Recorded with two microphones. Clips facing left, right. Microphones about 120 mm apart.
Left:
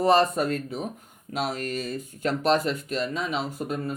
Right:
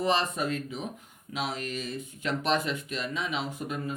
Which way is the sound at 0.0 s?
45° left (ahead or behind).